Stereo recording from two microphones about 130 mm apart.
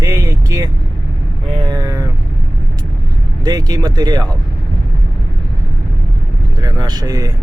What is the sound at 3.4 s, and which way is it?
Speech, 30° right (ahead or behind).